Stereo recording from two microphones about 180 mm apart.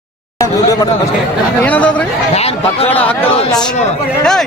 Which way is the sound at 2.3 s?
35° left (ahead or behind).